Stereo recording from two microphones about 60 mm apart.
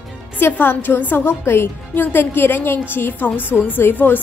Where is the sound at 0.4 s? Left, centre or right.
Left.